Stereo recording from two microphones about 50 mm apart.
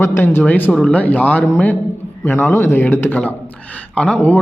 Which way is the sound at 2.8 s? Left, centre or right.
Left.